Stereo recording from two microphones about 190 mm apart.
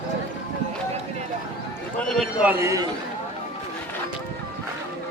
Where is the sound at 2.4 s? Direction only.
10° right (ahead or behind).